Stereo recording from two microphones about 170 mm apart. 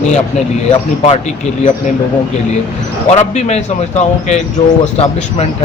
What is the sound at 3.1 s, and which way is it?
Speech, 40° left (ahead or behind).